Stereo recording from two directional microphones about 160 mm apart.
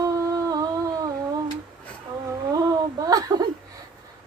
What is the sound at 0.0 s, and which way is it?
Humming, 20° right (ahead or behind).